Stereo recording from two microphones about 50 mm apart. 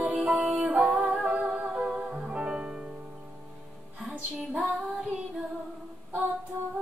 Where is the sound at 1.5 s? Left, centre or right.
Right.